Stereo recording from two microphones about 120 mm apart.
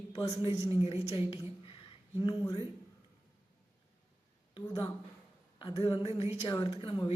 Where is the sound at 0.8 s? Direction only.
55° left (ahead or behind).